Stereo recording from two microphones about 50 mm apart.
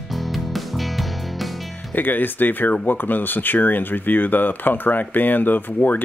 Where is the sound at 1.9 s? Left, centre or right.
Left.